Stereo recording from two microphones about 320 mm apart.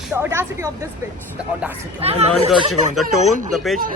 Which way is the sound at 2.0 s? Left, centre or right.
Centre.